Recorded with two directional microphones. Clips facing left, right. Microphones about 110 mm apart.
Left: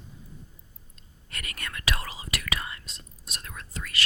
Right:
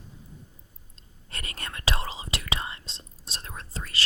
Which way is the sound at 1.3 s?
30° right (ahead or behind).